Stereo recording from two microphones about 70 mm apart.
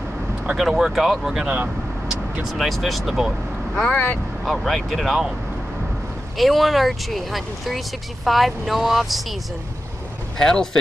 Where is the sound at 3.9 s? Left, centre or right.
Left.